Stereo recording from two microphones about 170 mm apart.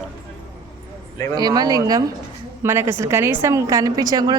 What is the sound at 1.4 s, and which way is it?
A woman's voice, 25° right (ahead or behind).